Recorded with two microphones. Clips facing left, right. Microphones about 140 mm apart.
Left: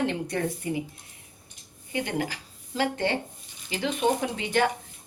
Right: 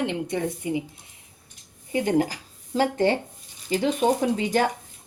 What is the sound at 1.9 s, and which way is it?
Speech, 40° right (ahead or behind).